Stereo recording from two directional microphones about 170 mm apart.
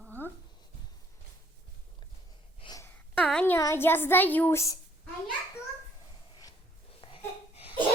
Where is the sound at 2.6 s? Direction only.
25° left (ahead or behind).